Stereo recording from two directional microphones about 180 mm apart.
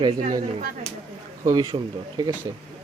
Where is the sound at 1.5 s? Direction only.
25° right (ahead or behind).